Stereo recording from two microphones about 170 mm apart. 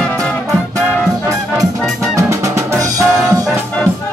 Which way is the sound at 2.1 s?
20° right (ahead or behind).